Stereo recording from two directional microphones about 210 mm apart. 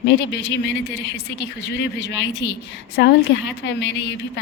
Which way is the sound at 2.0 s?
55° left (ahead or behind).